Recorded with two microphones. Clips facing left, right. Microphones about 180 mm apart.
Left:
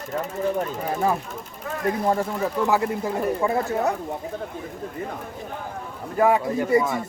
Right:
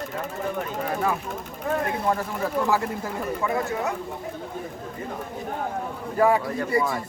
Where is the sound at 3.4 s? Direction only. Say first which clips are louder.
Even; 35° left (ahead or behind).